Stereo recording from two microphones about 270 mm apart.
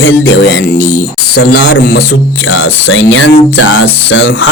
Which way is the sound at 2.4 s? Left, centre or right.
Left.